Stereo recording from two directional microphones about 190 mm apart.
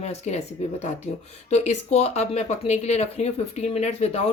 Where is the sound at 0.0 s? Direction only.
35° left (ahead or behind).